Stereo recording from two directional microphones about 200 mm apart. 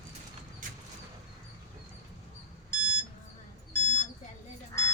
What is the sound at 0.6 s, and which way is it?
Vehicle, 40° right (ahead or behind).